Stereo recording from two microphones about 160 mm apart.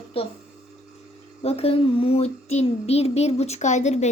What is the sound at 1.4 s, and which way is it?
Child singing, 40° left (ahead or behind).